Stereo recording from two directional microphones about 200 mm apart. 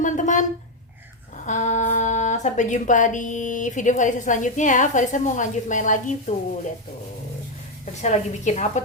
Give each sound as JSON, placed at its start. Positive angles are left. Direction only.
{"t": 0.0, "sound": "speech", "side_deg": 40}
{"t": 1.5, "sound": "speech", "side_deg": 35}
{"t": 8.0, "sound": "speech", "side_deg": 35}